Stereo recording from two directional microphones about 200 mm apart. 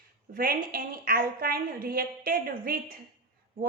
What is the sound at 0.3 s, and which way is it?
A woman's voice, 45° right (ahead or behind).